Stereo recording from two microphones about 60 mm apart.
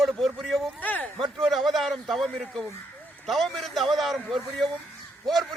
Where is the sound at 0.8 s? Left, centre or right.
Left.